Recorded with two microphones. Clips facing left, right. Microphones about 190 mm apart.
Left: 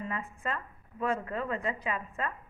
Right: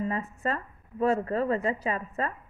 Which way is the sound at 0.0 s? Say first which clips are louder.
Right 6 dB; 40° right (ahead or behind).